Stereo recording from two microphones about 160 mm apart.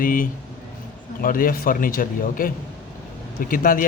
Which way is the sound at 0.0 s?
60° left (ahead or behind).